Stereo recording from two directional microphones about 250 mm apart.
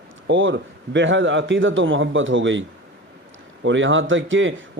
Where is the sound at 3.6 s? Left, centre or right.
Right.